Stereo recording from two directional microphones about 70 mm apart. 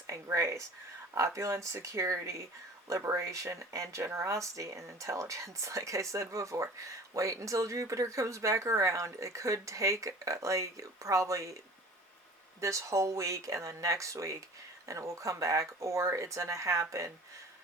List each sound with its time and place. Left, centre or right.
0.1 s speech: right
12.5 s speech: right